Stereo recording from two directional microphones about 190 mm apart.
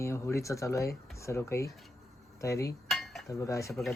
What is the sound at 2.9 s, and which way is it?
Cutlery, centre (ahead or behind).